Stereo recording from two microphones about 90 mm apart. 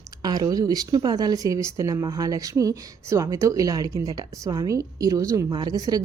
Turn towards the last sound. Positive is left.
turn(degrees=-45)  # may be behind; listen again after turning